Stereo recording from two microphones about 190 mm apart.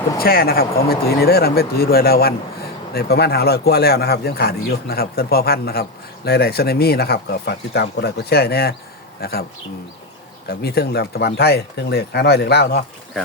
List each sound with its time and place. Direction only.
0.2 s speech: 50° left (ahead or behind)